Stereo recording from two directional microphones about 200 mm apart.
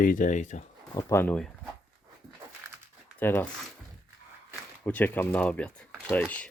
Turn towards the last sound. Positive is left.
turn(degrees=5)  # may be behind; listen again after turning